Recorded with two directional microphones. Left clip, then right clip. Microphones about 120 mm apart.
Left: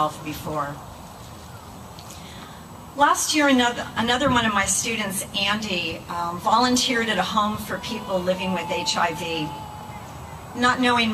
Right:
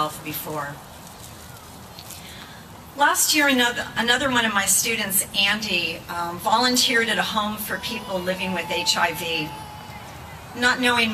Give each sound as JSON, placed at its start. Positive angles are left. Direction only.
{"t": 0.0, "sound": "speech", "side_deg": -20}
{"t": 3.3, "sound": "a woman's voice", "side_deg": -10}
{"t": 7.7, "sound": "a woman's voice", "side_deg": -25}
{"t": 10.6, "sound": "a woman's voice", "side_deg": -15}